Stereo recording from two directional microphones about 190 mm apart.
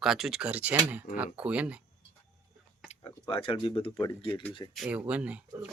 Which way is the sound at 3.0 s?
25° left (ahead or behind).